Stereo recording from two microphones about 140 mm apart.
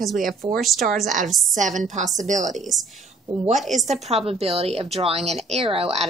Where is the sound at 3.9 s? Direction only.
50° right (ahead or behind).